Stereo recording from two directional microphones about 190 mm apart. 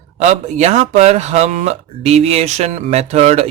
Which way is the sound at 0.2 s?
35° right (ahead or behind).